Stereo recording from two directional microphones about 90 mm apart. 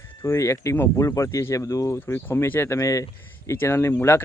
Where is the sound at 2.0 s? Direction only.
25° left (ahead or behind).